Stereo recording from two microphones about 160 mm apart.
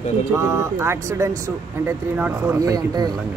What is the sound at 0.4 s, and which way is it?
Speech, 15° right (ahead or behind).